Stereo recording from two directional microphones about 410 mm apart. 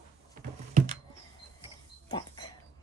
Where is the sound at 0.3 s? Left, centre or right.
Centre.